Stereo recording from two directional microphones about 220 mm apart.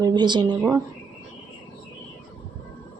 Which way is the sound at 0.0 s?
20° right (ahead or behind).